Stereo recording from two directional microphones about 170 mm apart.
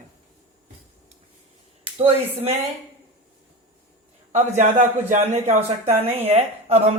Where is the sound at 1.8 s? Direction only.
35° right (ahead or behind).